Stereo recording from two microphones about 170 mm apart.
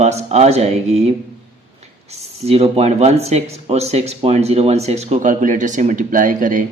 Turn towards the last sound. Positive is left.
turn(degrees=-50)  # may be behind; listen again after turning